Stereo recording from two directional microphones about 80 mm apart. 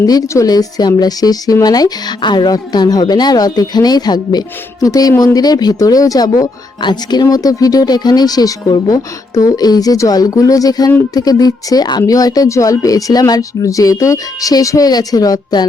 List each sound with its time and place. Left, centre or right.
0.0 s a woman's voice: left